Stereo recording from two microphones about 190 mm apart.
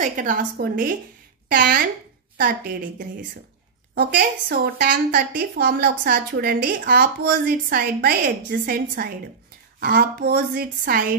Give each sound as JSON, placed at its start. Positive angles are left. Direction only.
{"t": 0.0, "sound": "a woman's voice", "side_deg": -45}
{"t": 3.9, "sound": "a woman's voice", "side_deg": -55}